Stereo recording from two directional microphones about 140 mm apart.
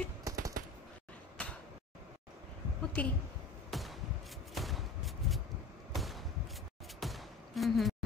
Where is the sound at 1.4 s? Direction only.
10° left (ahead or behind).